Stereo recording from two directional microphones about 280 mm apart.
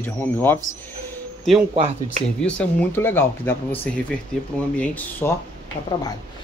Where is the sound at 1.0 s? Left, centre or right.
Centre.